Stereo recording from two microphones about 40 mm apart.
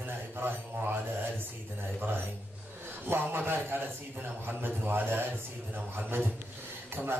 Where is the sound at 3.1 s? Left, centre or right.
Right.